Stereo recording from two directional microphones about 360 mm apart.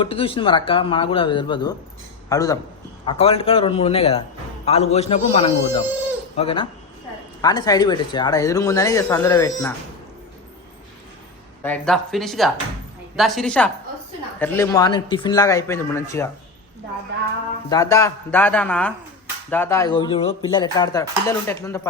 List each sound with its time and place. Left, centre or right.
0.0 s speech: centre
11.6 s speech: centre
17.7 s speech: centre